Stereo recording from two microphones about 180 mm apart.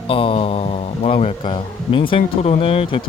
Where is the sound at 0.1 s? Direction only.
30° left (ahead or behind).